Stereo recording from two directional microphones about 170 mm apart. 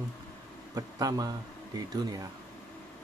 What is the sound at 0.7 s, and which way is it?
Speech, 20° right (ahead or behind).